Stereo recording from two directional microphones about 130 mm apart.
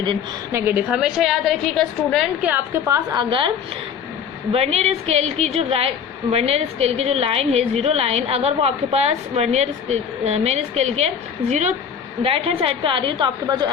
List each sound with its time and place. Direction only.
0.5 s a woman's voice: 15° right (ahead or behind)
1.0 s a woman's voice: centre (ahead or behind)
2.8 s a woman's voice: 25° right (ahead or behind)
3.2 s a woman's voice: 40° right (ahead or behind)
4.5 s a woman's voice: 50° right (ahead or behind)
12.2 s a woman's voice: 45° right (ahead or behind)